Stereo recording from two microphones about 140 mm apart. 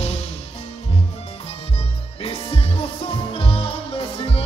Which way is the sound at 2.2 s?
45° left (ahead or behind).